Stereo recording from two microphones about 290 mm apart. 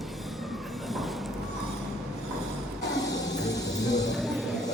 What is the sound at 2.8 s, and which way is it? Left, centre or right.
Music, centre.